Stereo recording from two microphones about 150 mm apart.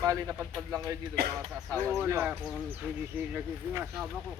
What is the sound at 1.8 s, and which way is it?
Speech, 15° right (ahead or behind).